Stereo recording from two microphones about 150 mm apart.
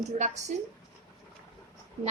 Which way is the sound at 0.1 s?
55° right (ahead or behind).